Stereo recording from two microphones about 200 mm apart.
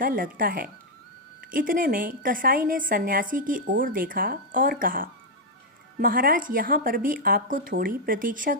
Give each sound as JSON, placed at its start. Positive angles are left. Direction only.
{"t": 0.0, "sound": "a woman's voice", "side_deg": -45}